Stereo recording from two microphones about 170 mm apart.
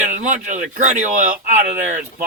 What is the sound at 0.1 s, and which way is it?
Speech, 50° right (ahead or behind).